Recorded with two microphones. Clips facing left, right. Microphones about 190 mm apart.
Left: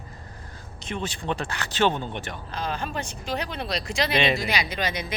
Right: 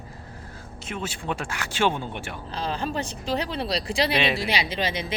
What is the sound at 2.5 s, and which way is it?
Speech, 30° right (ahead or behind).